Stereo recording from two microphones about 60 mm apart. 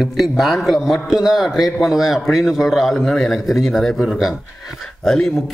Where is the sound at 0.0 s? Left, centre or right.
Centre.